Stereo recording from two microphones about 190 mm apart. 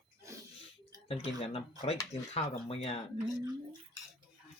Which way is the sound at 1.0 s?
30° left (ahead or behind).